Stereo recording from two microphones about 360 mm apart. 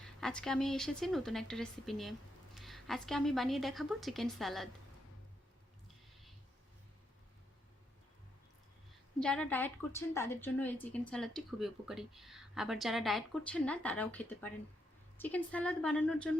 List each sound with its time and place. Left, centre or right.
0.0 s a woman's voice: centre
9.2 s a woman's voice: centre